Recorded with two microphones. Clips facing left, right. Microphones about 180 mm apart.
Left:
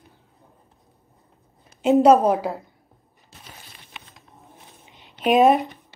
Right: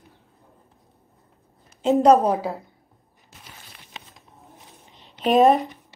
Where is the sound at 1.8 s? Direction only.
5° left (ahead or behind).